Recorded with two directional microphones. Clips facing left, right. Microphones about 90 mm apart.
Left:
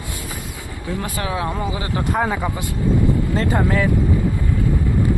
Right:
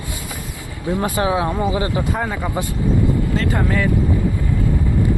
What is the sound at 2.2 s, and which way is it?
Speech, 10° left (ahead or behind).